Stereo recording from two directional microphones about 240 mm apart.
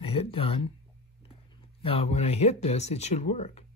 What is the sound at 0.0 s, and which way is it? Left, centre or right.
Speech, left.